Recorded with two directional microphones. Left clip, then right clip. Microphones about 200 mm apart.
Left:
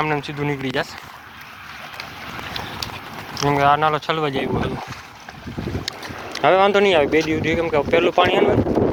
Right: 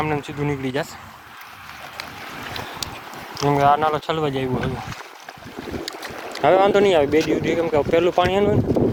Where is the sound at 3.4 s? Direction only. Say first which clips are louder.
Left 1 dB; 5° right (ahead or behind).